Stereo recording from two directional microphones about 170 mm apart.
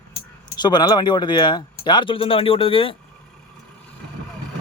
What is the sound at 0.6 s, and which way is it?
Speech, 25° left (ahead or behind).